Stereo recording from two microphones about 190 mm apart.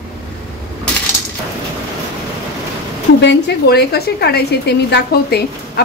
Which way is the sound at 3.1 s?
65° left (ahead or behind).